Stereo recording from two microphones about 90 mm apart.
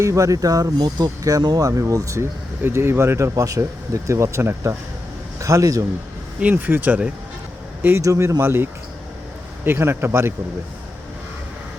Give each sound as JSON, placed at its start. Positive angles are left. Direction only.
{"t": 0.0, "sound": "speech", "side_deg": -35}
{"t": 2.6, "sound": "speech", "side_deg": -25}
{"t": 6.4, "sound": "speech", "side_deg": -20}
{"t": 8.0, "sound": "speech", "side_deg": -35}